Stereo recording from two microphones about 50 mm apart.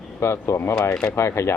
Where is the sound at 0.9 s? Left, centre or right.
Centre.